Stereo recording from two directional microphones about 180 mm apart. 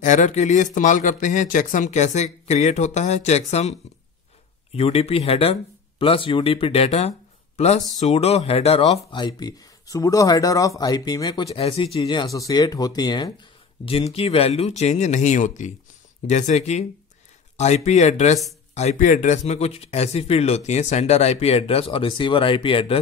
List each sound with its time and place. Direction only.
0.0 s speech: 40° left (ahead or behind)
4.7 s speech: 35° left (ahead or behind)